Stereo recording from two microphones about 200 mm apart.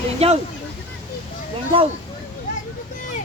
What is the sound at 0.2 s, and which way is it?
Speech, 30° right (ahead or behind).